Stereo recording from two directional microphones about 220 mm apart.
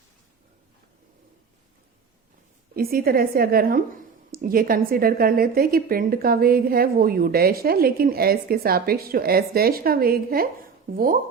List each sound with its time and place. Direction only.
2.7 s a woman's voice: 40° right (ahead or behind)